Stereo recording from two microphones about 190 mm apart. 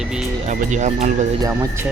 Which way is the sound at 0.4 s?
40° right (ahead or behind).